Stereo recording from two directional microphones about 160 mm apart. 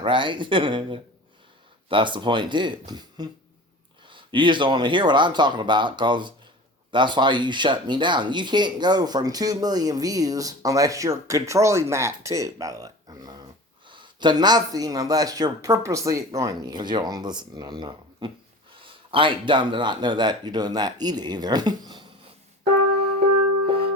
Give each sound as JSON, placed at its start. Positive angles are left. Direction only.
{"t": 0.0, "sound": "speech", "side_deg": -30}